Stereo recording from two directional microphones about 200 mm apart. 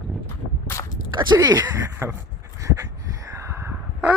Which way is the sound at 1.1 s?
20° right (ahead or behind).